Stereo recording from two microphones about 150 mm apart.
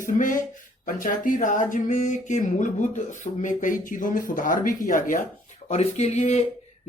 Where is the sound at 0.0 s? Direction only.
60° left (ahead or behind).